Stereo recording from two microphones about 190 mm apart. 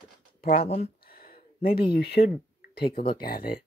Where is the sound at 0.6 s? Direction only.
35° left (ahead or behind).